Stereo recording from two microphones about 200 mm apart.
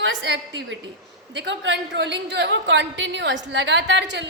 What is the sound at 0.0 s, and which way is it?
A woman's voice, 65° right (ahead or behind).